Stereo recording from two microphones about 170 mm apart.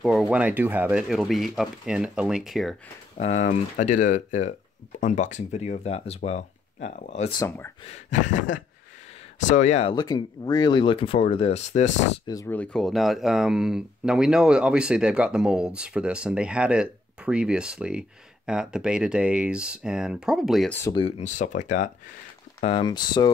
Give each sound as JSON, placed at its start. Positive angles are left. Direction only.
{"t": 0.0, "sound": "speech", "side_deg": -5}
{"t": 3.2, "sound": "speech", "side_deg": 45}
{"t": 7.3, "sound": "speech", "side_deg": 15}
{"t": 7.9, "sound": "speech", "side_deg": 45}
{"t": 9.5, "sound": "speech", "side_deg": 45}
{"t": 9.9, "sound": "speech", "side_deg": 25}
{"t": 12.3, "sound": "speech", "side_deg": 20}
{"t": 12.5, "sound": "speech", "side_deg": 5}
{"t": 21.2, "sound": "speech", "side_deg": 45}
{"t": 22.6, "sound": "speech", "side_deg": 35}
{"t": 22.8, "sound": "speech", "side_deg": 25}